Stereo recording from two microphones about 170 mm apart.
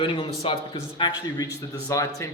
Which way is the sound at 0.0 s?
30° left (ahead or behind).